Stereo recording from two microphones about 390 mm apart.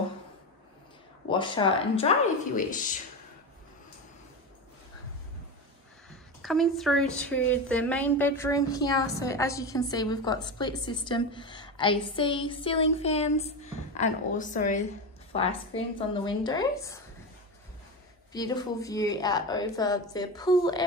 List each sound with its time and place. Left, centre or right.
1.3 s a woman's voice: centre
6.4 s a woman's voice: centre
18.3 s a woman's voice: centre